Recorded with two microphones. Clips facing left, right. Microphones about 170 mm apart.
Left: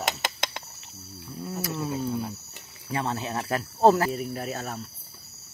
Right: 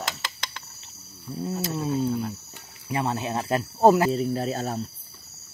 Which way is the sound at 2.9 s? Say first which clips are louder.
Right 3 dB; 15° right (ahead or behind).